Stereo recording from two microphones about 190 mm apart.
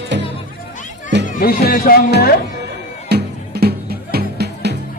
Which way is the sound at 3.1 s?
55° right (ahead or behind).